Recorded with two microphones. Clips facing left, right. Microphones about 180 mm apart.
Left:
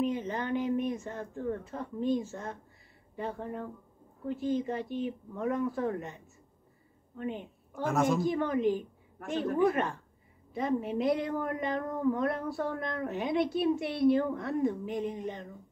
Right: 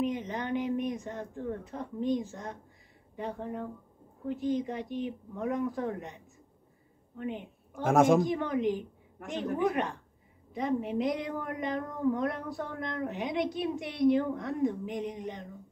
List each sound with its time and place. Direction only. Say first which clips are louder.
0.0 s a woman's voice: left 1 dB; 15° right (ahead or behind)